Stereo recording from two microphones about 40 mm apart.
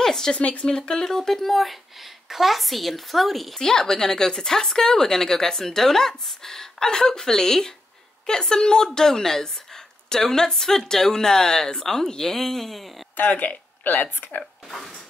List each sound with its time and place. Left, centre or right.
0.0 s a sound: centre
0.4 s speech: left
0.7 s speech: left
1.0 s a woman's voice: centre
3.6 s speech: centre
13.1 s speech: left
14.7 s a sound: centre